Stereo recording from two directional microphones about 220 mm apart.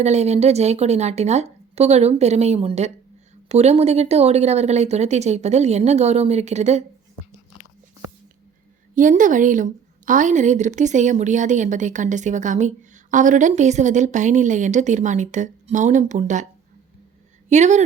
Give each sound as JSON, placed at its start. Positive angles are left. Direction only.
{"t": 0.0, "sound": "speech", "side_deg": -30}
{"t": 9.0, "sound": "a woman's voice", "side_deg": -35}
{"t": 17.5, "sound": "a woman's voice", "side_deg": -30}